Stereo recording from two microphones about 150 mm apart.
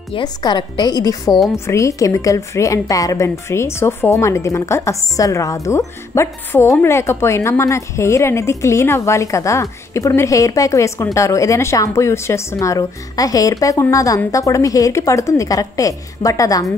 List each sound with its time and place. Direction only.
0.1 s speech: 30° left (ahead or behind)